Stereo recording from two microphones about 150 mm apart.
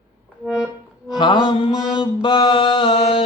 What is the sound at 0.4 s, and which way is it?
Accordion, 5° right (ahead or behind).